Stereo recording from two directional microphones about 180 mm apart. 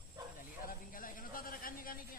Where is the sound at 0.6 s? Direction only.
50° left (ahead or behind).